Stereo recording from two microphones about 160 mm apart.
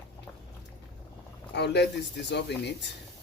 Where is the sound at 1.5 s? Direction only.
90° left.